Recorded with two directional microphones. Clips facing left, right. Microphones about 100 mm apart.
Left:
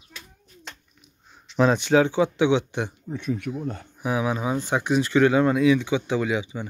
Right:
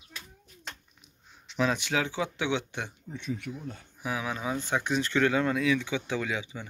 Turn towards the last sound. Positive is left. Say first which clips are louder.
# left 7 dB
turn(degrees=15)  # may be behind; listen again after turning